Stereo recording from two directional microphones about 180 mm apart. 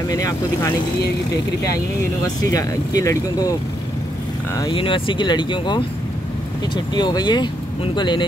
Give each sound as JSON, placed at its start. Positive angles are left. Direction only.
{"t": 0.1, "sound": "speech", "side_deg": 20}
{"t": 2.2, "sound": "speech", "side_deg": 20}
{"t": 4.6, "sound": "speech", "side_deg": 30}
{"t": 6.9, "sound": "speech", "side_deg": 25}